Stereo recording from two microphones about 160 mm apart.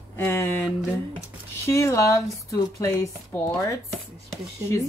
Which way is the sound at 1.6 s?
20° left (ahead or behind).